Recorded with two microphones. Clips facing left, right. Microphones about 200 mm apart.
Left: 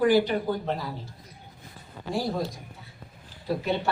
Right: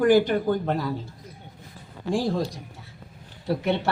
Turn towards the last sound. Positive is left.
turn(degrees=-75)  # may be behind; listen again after turning